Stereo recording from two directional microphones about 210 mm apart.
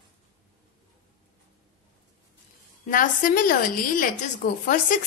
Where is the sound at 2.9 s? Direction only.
40° left (ahead or behind).